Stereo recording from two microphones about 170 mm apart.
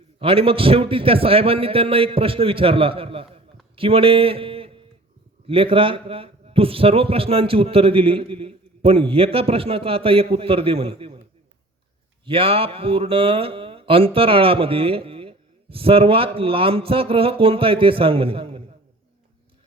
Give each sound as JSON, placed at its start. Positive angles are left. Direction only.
{"t": 0.2, "sound": "speech", "side_deg": -30}
{"t": 12.2, "sound": "speech", "side_deg": -35}